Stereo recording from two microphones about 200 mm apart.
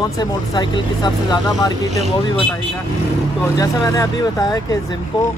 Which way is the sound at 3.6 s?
15° left (ahead or behind).